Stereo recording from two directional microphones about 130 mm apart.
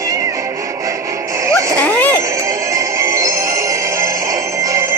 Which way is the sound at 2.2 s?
25° right (ahead or behind).